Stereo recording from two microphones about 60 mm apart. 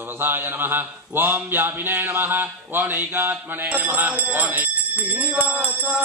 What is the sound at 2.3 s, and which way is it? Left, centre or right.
Speech, right.